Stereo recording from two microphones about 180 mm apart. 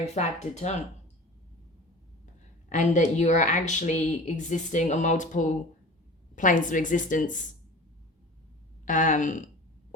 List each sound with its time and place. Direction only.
0.0 s speech: 40° left (ahead or behind)
2.6 s a woman's voice: 45° left (ahead or behind)
8.8 s speech: 45° left (ahead or behind)